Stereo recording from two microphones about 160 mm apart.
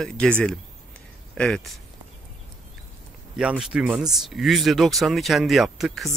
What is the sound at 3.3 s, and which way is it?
Speech, 5° right (ahead or behind).